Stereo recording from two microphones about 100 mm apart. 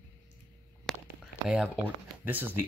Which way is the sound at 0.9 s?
5° left (ahead or behind).